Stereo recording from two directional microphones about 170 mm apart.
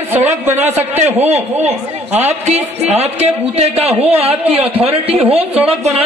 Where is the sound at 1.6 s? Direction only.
40° right (ahead or behind).